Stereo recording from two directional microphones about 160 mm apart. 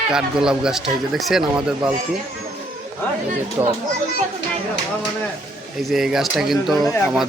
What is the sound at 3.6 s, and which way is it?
Speech, 20° right (ahead or behind).